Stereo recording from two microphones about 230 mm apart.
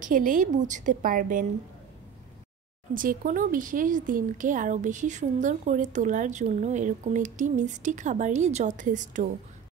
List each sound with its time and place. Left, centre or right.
0.0 s speech: right
2.9 s speech: right